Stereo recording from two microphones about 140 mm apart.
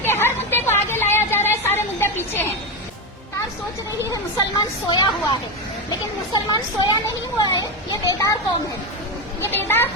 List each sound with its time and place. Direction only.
0.0 s a sound: 15° left (ahead or behind)
4.1 s a woman's voice: 30° left (ahead or behind)
9.4 s speech: 15° left (ahead or behind)